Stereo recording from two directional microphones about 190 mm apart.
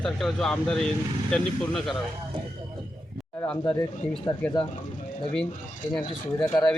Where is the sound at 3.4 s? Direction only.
5° left (ahead or behind).